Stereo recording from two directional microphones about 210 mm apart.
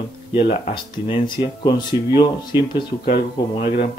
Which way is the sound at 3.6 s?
40° left (ahead or behind).